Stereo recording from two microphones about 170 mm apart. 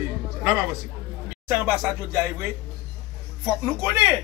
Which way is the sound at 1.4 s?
10° right (ahead or behind).